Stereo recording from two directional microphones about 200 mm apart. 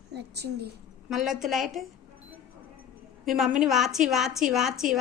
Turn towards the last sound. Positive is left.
turn(degrees=0)  # may be behind; listen again after turning